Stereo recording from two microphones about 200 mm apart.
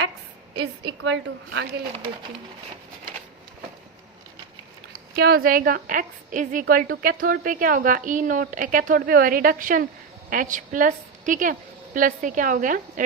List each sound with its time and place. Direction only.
0.6 s a woman's voice: 60° right (ahead or behind)
5.1 s a woman's voice: 50° right (ahead or behind)